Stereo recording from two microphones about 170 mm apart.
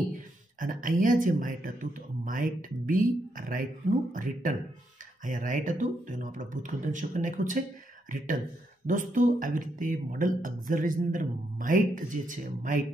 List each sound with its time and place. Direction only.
0.1 s speech: 50° right (ahead or behind)
8.8 s speech: 50° right (ahead or behind)